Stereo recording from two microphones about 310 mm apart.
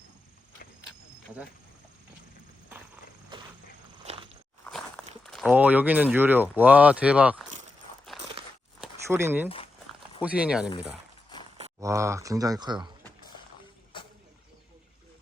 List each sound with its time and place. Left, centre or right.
2.6 s horse: centre
4.1 s walk: right
4.6 s speech: centre
8.8 s a sound: centre
10.2 s speech: centre
11.8 s speech: centre
13.0 s a sound: centre